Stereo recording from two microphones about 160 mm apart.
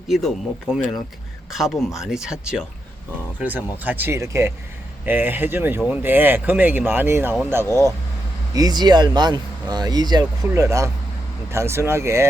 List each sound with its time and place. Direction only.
0.1 s speech: centre (ahead or behind); by 12.2 s 15° right (ahead or behind)